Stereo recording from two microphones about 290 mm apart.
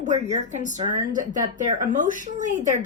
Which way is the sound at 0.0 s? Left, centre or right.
Right.